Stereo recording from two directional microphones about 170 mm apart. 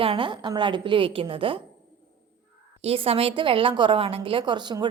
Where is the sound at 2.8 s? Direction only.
35° right (ahead or behind).